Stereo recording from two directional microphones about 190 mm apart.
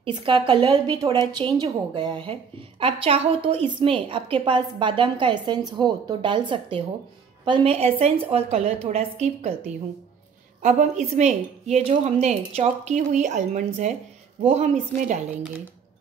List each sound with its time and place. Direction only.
0.0 s a woman's voice: 30° right (ahead or behind)
1.1 s a woman's voice: 15° left (ahead or behind)
1.4 s a woman's voice: 25° right (ahead or behind)
10.6 s speech: 40° right (ahead or behind)